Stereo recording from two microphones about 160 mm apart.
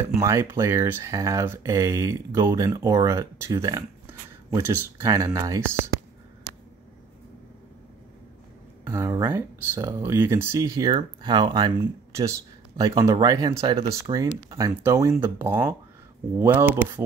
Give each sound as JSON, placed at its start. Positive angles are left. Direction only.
{"t": 0.2, "sound": "speech", "side_deg": -15}
{"t": 8.8, "sound": "speech", "side_deg": -20}